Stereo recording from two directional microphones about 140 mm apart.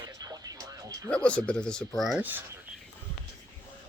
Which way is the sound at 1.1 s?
10° left (ahead or behind).